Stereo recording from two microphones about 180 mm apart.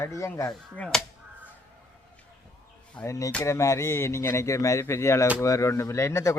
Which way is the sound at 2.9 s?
15° left (ahead or behind).